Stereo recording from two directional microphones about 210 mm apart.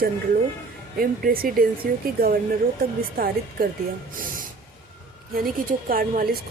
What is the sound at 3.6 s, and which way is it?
Speech, 45° right (ahead or behind).